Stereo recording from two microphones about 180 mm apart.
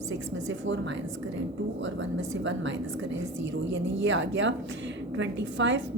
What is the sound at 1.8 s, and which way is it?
A woman's voice, 90° right.